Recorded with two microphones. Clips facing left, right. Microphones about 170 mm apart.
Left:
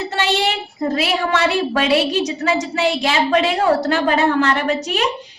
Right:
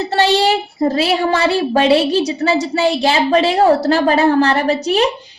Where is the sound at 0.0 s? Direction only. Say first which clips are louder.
Right 5 dB; 35° right (ahead or behind).